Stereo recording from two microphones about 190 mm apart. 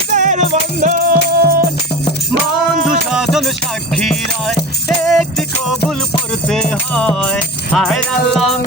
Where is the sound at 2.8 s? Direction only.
Centre (ahead or behind).